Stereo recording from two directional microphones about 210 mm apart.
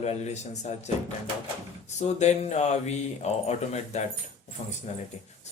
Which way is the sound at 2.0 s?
30° left (ahead or behind).